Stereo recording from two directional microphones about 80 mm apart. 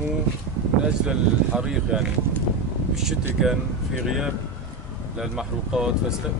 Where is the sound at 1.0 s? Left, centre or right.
Centre.